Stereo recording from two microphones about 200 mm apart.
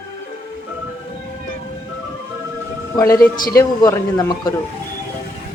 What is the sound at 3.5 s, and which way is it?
Speech, 20° left (ahead or behind).